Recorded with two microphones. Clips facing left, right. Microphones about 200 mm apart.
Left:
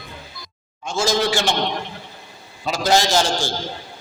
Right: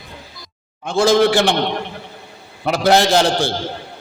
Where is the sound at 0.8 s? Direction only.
60° right (ahead or behind).